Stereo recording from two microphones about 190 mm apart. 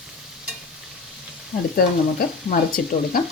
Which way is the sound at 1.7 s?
50° left (ahead or behind).